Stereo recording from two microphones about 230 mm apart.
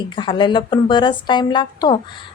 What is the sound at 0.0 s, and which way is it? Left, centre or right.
Speech, left.